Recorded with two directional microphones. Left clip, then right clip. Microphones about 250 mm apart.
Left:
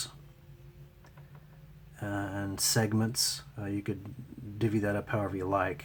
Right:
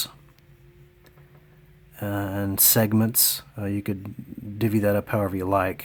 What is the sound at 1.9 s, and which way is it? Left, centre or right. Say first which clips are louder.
Speech: right 7 dB; right.